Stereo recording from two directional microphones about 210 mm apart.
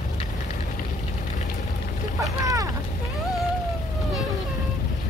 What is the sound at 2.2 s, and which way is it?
Boat, 15° right (ahead or behind).